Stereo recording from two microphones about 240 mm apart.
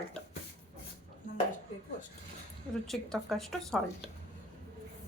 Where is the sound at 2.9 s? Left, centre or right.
Centre.